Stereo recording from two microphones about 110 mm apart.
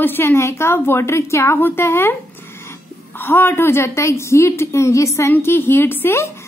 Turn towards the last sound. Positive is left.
turn(degrees=25)  # may be behind; listen again after turning